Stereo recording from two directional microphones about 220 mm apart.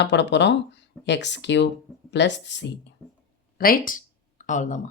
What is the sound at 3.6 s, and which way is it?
Speech, 40° left (ahead or behind).